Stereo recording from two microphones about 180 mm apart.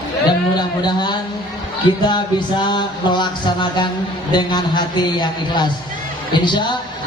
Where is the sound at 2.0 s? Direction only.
25° left (ahead or behind).